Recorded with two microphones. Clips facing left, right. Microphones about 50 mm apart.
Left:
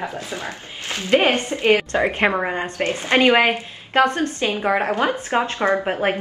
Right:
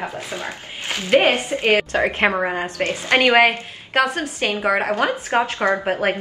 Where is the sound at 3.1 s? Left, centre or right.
Right.